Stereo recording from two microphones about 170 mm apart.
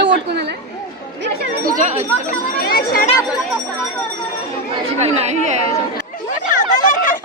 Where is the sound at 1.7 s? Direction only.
45° right (ahead or behind).